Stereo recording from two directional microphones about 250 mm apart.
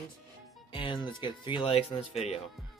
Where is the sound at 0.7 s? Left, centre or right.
Left.